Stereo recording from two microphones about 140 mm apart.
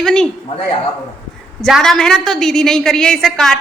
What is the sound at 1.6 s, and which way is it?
A woman's voice, 5° left (ahead or behind).